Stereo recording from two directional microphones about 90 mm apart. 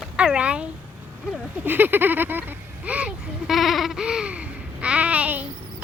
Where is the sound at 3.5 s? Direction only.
Centre (ahead or behind).